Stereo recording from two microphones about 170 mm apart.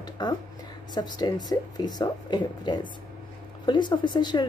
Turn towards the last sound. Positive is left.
turn(degrees=25)  # may be behind; listen again after turning